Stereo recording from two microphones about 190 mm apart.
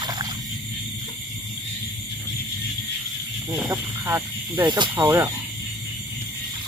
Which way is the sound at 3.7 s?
15° right (ahead or behind).